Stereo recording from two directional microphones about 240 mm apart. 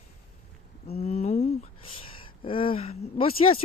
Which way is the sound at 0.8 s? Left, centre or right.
Left.